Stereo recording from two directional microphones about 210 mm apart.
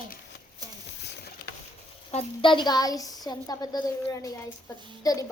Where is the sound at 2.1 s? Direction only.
25° left (ahead or behind).